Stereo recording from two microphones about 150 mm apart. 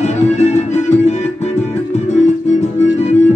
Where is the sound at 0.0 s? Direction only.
45° left (ahead or behind).